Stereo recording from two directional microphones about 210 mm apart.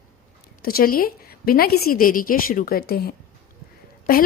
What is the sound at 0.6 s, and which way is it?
A woman's voice, 45° left (ahead or behind).